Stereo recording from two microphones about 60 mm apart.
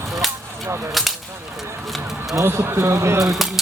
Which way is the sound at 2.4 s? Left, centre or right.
Right.